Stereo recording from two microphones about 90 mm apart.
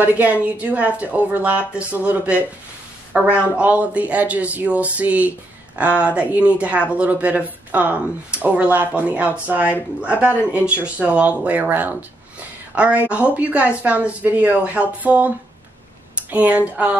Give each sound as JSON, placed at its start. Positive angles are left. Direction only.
{"t": 0.0, "sound": "speech", "side_deg": -20}